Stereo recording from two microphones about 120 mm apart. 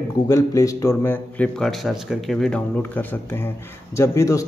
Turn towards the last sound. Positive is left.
turn(degrees=25)  # may be behind; listen again after turning